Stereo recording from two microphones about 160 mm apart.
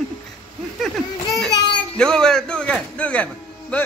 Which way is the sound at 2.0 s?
5° left (ahead or behind).